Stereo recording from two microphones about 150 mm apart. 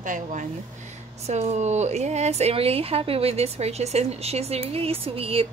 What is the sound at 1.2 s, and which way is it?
A woman's voice, 50° right (ahead or behind).